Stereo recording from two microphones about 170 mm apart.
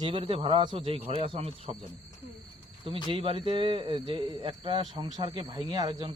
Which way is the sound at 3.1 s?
30° right (ahead or behind).